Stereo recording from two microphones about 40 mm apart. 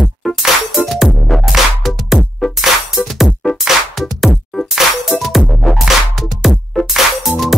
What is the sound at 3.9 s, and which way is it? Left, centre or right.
Music, centre.